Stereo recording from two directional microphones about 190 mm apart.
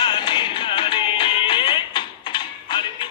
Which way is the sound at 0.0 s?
25° left (ahead or behind).